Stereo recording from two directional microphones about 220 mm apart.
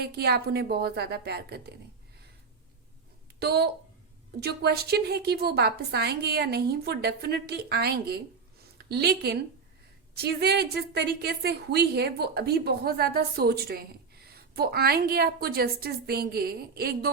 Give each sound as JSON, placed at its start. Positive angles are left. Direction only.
{"t": 0.0, "sound": "a woman's voice", "side_deg": -45}
{"t": 3.4, "sound": "a woman's voice", "side_deg": -50}